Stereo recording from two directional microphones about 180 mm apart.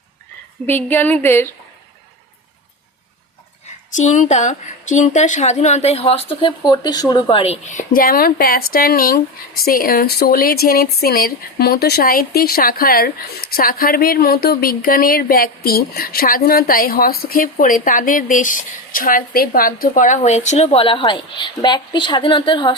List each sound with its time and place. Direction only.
0.7 s a woman's voice: 10° left (ahead or behind)
3.9 s speech: 45° left (ahead or behind)
19.9 s a woman's voice: 40° left (ahead or behind)